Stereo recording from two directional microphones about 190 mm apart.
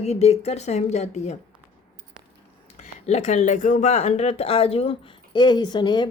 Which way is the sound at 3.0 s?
35° left (ahead or behind).